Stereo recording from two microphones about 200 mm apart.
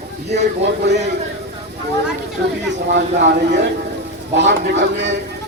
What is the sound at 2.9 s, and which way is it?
Speech, 60° right (ahead or behind).